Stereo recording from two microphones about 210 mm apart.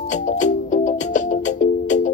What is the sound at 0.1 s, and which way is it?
Music, 35° left (ahead or behind).